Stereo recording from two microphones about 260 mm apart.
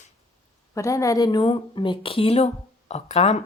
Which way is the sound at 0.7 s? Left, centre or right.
Centre.